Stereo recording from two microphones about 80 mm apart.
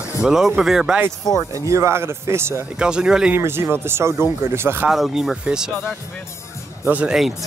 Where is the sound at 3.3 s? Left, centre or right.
Right.